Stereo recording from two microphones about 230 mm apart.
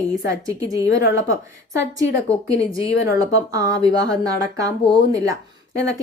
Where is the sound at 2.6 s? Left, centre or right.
Centre.